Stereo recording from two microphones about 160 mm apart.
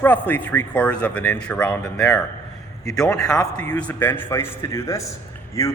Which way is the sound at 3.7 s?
10° left (ahead or behind).